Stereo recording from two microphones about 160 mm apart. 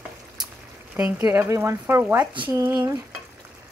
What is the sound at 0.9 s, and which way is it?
Speech, 10° right (ahead or behind).